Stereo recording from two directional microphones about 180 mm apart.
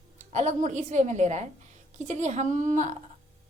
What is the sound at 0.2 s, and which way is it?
A woman's voice, 40° right (ahead or behind).